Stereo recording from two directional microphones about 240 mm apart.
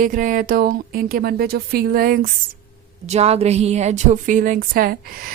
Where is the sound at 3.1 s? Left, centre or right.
Right.